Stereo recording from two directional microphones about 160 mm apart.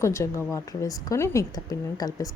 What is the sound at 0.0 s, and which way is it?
A woman's voice, 20° left (ahead or behind).